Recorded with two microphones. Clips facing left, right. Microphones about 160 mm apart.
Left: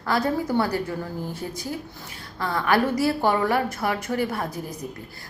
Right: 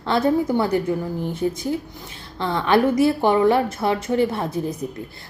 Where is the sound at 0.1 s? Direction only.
20° right (ahead or behind).